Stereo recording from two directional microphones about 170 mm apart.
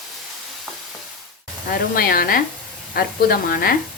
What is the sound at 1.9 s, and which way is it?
Speech, 60° left (ahead or behind).